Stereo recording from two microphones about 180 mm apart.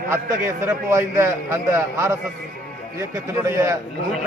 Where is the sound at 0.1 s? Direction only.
15° right (ahead or behind).